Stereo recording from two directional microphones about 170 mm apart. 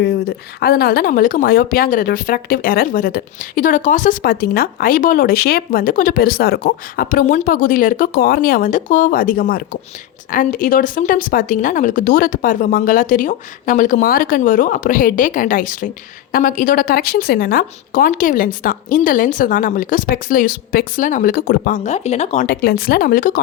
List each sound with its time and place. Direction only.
0.0 s a woman's voice: 70° left (ahead or behind); by 22.4 s 40° left (ahead or behind)
22.4 s a woman's voice: 60° left (ahead or behind)